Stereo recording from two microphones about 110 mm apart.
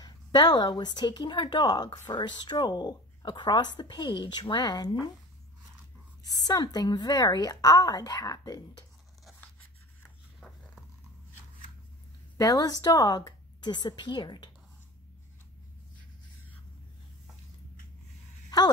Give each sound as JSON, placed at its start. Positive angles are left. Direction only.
{"t": 0.0, "sound": "speech", "side_deg": 35}
{"t": 6.4, "sound": "speech", "side_deg": 35}
{"t": 10.4, "sound": "dog", "side_deg": 5}
{"t": 12.4, "sound": "speech", "side_deg": 35}